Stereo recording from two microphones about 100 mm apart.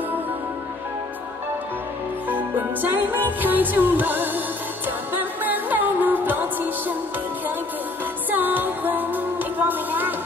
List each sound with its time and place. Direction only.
2.2 s music: 20° right (ahead or behind)
8.3 s music: 20° right (ahead or behind)